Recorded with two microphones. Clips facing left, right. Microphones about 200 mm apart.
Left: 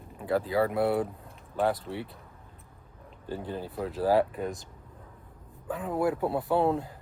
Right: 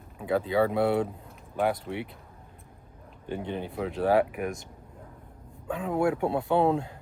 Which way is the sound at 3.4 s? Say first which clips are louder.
Right 3 dB; 25° right (ahead or behind).